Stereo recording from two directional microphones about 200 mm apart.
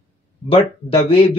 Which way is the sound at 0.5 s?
25° left (ahead or behind).